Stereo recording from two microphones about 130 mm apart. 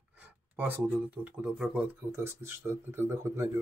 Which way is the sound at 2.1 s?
20° right (ahead or behind).